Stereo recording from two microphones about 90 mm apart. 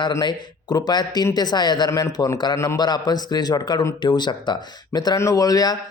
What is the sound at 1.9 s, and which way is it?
Speech, 35° left (ahead or behind).